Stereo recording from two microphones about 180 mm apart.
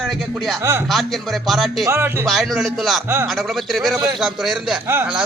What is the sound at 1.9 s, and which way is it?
Speech, 15° right (ahead or behind).